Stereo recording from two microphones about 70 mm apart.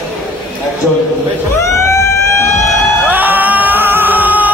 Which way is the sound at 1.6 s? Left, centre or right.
Left.